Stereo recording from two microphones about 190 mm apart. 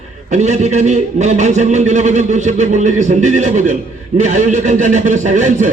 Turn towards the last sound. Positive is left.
turn(degrees=-40)  # may be behind; listen again after turning